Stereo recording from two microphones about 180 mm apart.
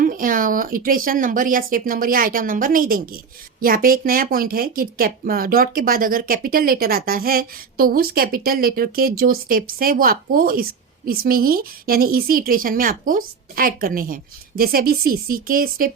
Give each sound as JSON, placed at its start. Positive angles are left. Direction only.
{"t": 0.0, "sound": "speech", "side_deg": -50}